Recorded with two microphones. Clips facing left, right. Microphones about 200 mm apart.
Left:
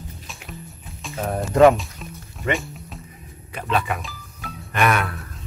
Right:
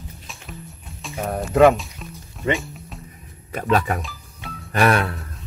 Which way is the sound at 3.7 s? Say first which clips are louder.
Right 3 dB; 40° right (ahead or behind).